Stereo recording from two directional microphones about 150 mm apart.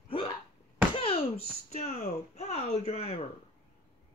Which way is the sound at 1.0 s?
40° left (ahead or behind).